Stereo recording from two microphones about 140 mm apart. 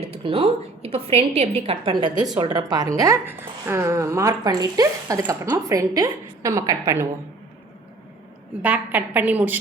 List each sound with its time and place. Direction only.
0.1 s a woman's voice: 45° right (ahead or behind); by 7.1 s 20° right (ahead or behind)
8.6 s a woman's voice: 10° right (ahead or behind)